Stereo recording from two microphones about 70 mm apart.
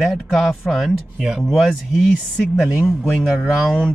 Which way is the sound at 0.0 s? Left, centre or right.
Centre.